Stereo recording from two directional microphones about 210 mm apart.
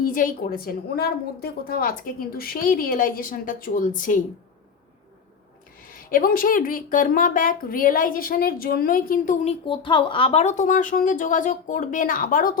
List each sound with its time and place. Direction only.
0.0 s a woman's voice: 40° left (ahead or behind)
5.9 s a woman's voice: 40° left (ahead or behind)